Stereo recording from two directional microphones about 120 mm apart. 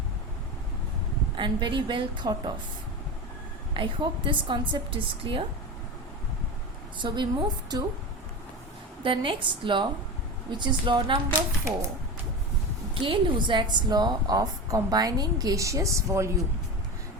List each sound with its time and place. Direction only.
1.4 s a woman's voice: 40° right (ahead or behind)
3.8 s a woman's voice: 45° right (ahead or behind)
7.0 s a woman's voice: 40° right (ahead or behind)
9.0 s a woman's voice: 45° right (ahead or behind)
12.9 s a woman's voice: 45° right (ahead or behind); by 16.3 s 25° right (ahead or behind)